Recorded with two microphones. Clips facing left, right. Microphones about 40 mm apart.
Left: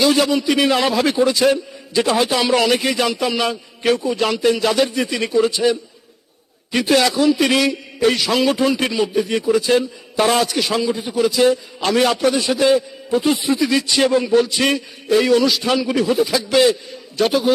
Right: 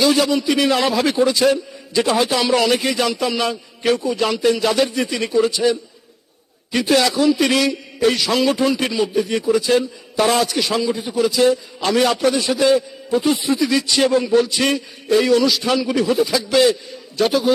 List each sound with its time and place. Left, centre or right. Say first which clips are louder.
0.0 s a man's voice: even; centre
0.5 s a man's voice: left 1 dB; left
0.8 s a man's voice: even; centre
4.4 s a man's voice: even; centre
12.2 s a man's voice: even; centre